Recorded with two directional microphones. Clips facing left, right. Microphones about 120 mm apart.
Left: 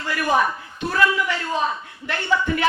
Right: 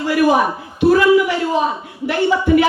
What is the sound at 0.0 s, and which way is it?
A woman's voice, 15° right (ahead or behind).